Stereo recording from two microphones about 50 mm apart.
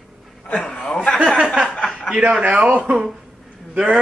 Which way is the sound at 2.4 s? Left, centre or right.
Right.